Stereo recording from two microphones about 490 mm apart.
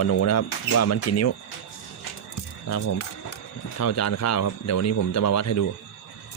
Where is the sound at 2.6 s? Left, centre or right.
Left.